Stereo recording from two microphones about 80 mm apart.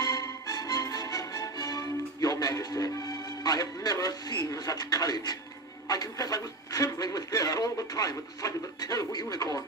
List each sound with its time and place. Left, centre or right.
0.0 s music: left
5.9 s speech: left